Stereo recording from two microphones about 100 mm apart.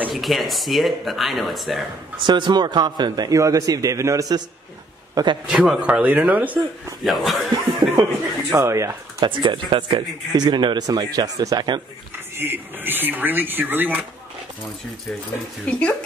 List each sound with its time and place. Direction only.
0.1 s speech: centre (ahead or behind)
2.1 s a man's voice: 50° right (ahead or behind); by 4.3 s 30° right (ahead or behind)
5.1 s a man's voice: 50° right (ahead or behind)
5.5 s speech: 10° right (ahead or behind)
7.1 s speech: centre (ahead or behind)
7.9 s speech: 30° right (ahead or behind)
9.2 s speech: 55° right (ahead or behind)
10.3 s a man's voice: 50° right (ahead or behind)
12.4 s speech: 20° right (ahead or behind)
15.7 s speech: 10° left (ahead or behind)